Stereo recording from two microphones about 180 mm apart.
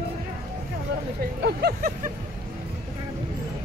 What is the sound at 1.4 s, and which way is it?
Vehicle, 60° right (ahead or behind).